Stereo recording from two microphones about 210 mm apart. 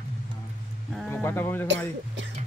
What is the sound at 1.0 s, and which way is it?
Speech, 10° left (ahead or behind).